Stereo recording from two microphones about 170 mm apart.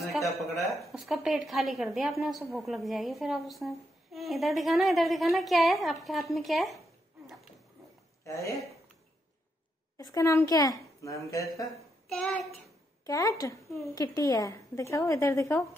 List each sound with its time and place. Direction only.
0.0 s a sound: centre (ahead or behind)
0.9 s a woman's voice: centre (ahead or behind)
8.2 s speech: 20° left (ahead or behind)
9.9 s a woman's voice: 15° left (ahead or behind)
12.1 s a woman's voice: 5° left (ahead or behind)
13.0 s a woman's voice: 20° left (ahead or behind)